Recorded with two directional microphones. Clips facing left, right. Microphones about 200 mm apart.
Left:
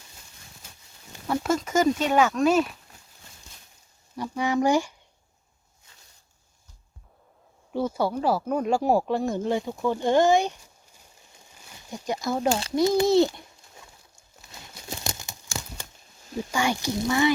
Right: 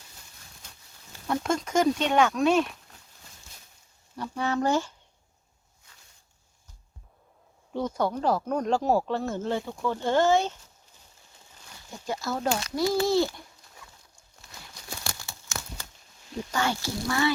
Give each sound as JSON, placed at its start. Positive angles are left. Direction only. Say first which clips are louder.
{"t": 0.6, "sound": "livestock", "louder": "even", "side_deg": 5}
{"t": 1.3, "sound": "speech", "louder": "left 2 dB", "side_deg": 5}
{"t": 4.2, "sound": "speech", "louder": "left 3 dB", "side_deg": 10}
{"t": 7.7, "sound": "speech", "louder": "left 2 dB", "side_deg": 5}
{"t": 11.5, "sound": "a sound", "louder": "left 5 dB", "side_deg": 15}
{"t": 12.5, "sound": "speech", "louder": "left 4 dB", "side_deg": 30}
{"t": 14.6, "sound": "a sound", "louder": "left 4 dB", "side_deg": 20}
{"t": 16.5, "sound": "speech", "louder": "left 3 dB", "side_deg": 15}